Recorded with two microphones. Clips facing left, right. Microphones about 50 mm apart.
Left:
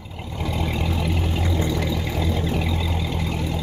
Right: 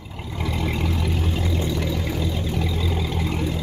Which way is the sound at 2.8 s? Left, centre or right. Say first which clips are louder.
Right 1 dB; centre.